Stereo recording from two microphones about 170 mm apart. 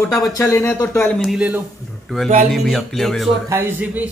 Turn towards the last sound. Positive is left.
turn(degrees=-10)  # may be behind; listen again after turning